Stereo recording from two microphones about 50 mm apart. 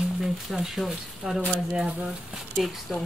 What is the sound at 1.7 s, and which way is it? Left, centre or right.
Speech, right.